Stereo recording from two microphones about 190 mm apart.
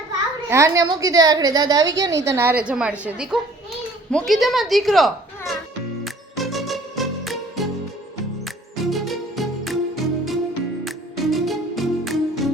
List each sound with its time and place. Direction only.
0.5 s a woman's voice: 15° right (ahead or behind); by 5.1 s centre (ahead or behind)
6.3 s music: centre (ahead or behind)
8.7 s music: centre (ahead or behind)